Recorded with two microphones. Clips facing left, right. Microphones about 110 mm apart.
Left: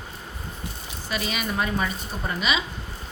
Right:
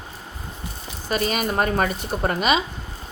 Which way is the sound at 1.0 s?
45° right (ahead or behind).